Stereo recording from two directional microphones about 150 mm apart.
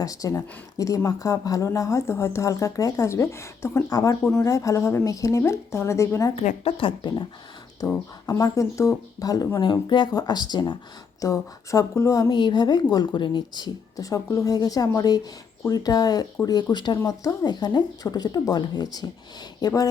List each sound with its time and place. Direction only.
0.0 s speech: 25° left (ahead or behind)
6.7 s speech: 35° left (ahead or behind)
7.8 s speech: 25° left (ahead or behind)
12.3 s speech: 30° left (ahead or behind)